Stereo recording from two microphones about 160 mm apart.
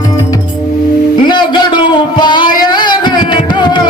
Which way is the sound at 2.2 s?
30° left (ahead or behind).